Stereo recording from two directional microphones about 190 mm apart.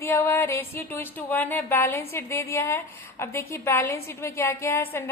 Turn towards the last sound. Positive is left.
turn(degrees=10)  # may be behind; listen again after turning